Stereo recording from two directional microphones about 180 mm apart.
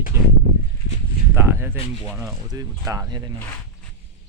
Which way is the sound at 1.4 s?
15° right (ahead or behind).